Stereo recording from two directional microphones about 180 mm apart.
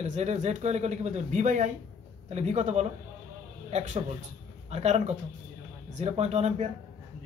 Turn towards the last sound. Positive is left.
turn(degrees=-35)  # may be behind; listen again after turning